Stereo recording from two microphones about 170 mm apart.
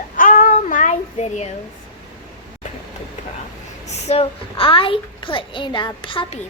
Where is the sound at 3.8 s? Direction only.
40° left (ahead or behind).